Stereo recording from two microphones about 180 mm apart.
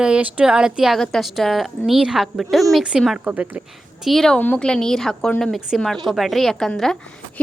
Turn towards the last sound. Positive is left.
turn(degrees=5)  # may be behind; listen again after turning